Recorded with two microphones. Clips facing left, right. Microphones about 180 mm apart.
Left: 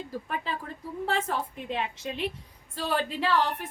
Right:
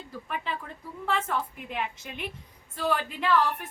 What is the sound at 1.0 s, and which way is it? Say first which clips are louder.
A woman's voice: even; 35° left (ahead or behind).